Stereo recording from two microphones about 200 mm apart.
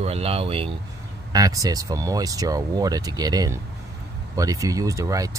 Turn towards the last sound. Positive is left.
turn(degrees=-15)  # may be behind; listen again after turning